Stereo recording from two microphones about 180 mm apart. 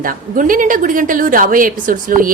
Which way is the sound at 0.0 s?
50° right (ahead or behind).